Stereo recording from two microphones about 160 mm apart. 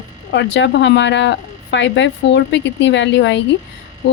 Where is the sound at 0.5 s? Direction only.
90° left.